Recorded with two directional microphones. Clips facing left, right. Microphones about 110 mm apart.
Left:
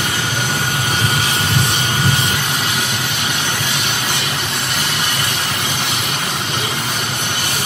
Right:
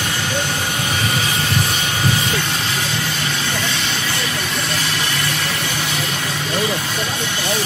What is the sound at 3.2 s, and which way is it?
Vehicle, 20° left (ahead or behind).